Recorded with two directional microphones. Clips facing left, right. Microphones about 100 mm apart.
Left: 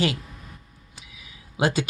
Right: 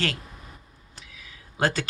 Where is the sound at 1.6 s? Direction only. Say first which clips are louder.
Left 2 dB; 15° left (ahead or behind).